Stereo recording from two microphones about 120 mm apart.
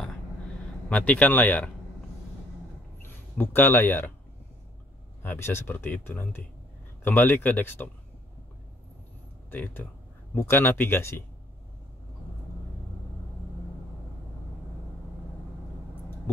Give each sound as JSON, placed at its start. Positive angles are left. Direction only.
{"t": 0.8, "sound": "speech", "side_deg": 10}
{"t": 3.0, "sound": "speech", "side_deg": 15}
{"t": 5.2, "sound": "speech", "side_deg": 20}
{"t": 9.5, "sound": "speech", "side_deg": 15}